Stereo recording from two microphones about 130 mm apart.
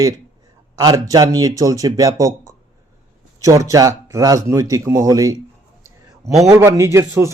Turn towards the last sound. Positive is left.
turn(degrees=-25)  # may be behind; listen again after turning